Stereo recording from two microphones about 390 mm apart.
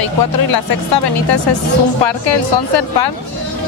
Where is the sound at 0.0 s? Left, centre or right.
Left.